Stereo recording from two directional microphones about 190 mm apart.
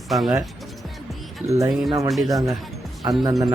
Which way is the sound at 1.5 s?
15° right (ahead or behind).